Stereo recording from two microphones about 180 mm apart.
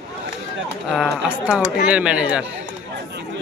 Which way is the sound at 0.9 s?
5° right (ahead or behind).